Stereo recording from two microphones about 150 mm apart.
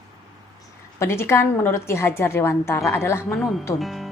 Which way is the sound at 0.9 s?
15° left (ahead or behind).